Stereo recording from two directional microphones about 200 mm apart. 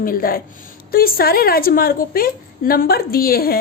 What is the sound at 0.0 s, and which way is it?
A woman's voice, 45° left (ahead or behind).